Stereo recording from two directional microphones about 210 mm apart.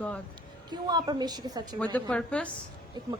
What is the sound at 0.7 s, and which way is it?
Speech, 20° right (ahead or behind).